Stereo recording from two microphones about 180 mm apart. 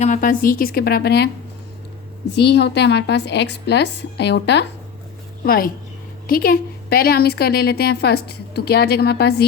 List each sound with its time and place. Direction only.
0.0 s a woman's voice: 45° left (ahead or behind); by 1.3 s 65° left (ahead or behind)
2.3 s a woman's voice: 70° left (ahead or behind)
5.5 s a woman's voice: 55° left (ahead or behind)